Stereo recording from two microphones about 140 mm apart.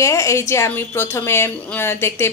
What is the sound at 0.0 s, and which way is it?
Speech, 20° left (ahead or behind).